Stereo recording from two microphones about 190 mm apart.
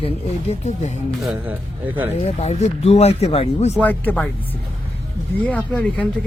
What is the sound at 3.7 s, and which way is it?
Speech, 10° left (ahead or behind).